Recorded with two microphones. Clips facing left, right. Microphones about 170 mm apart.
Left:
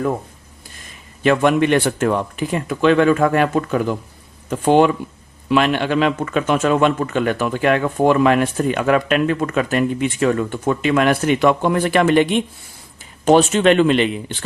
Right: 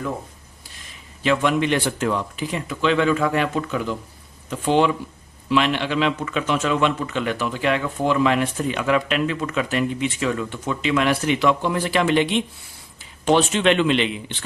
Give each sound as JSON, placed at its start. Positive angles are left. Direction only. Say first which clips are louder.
{"t": 1.2, "sound": "speech", "louder": "left 5 dB", "side_deg": 50}